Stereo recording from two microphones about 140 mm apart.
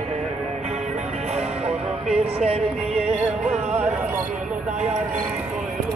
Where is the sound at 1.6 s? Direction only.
45° right (ahead or behind).